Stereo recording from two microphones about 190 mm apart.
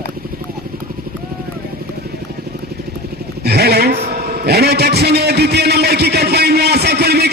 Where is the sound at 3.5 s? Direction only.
55° right (ahead or behind).